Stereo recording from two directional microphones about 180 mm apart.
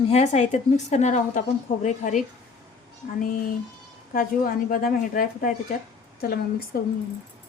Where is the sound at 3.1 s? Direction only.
50° left (ahead or behind).